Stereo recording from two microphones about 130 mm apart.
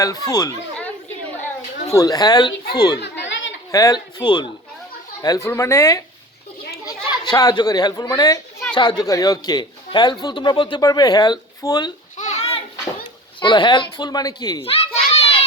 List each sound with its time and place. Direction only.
0.0 s a man's voice: 25° left (ahead or behind)
12.1 s a sound: 65° left (ahead or behind)
13.4 s a man's voice: 35° left (ahead or behind)
14.6 s children playing: 50° left (ahead or behind)